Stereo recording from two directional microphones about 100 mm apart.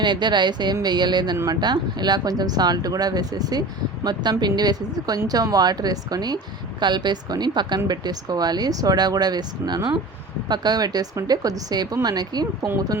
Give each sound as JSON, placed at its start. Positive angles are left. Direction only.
{"t": 0.0, "sound": "speech", "side_deg": -50}